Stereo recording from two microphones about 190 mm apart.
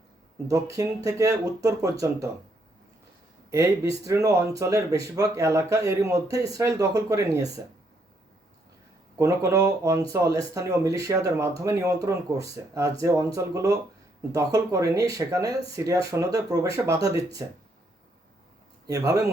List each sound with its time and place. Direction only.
0.4 s speech: 15° right (ahead or behind)
3.5 s speech: 15° right (ahead or behind)
9.1 s speech: 15° right (ahead or behind)
18.9 s speech: 20° right (ahead or behind)